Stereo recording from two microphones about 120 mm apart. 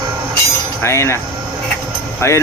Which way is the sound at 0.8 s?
20° left (ahead or behind).